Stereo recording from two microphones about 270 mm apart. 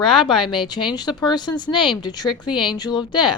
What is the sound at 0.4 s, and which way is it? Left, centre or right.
A woman's voice, centre.